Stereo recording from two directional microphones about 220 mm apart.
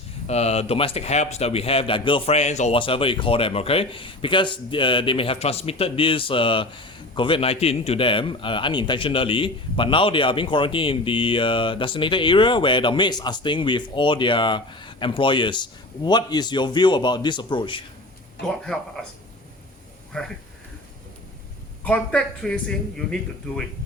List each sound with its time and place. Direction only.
0.3 s speech: 30° left (ahead or behind)
18.4 s speech: centre (ahead or behind)
20.1 s speech: 5° left (ahead or behind)
21.8 s speech: 5° left (ahead or behind)